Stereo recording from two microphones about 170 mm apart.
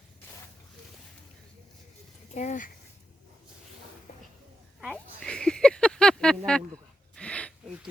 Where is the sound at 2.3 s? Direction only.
45° left (ahead or behind).